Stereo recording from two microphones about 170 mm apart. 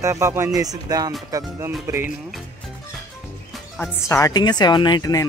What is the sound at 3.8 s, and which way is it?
Speech, 15° left (ahead or behind).